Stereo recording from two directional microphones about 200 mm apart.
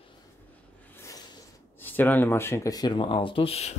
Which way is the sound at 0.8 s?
15° left (ahead or behind).